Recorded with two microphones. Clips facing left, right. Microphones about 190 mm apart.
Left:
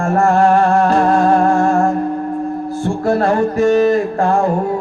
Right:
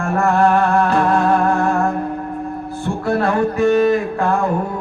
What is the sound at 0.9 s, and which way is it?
Music, 60° right (ahead or behind).